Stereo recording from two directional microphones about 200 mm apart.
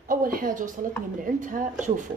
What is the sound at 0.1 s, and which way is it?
A woman's voice, 45° right (ahead or behind).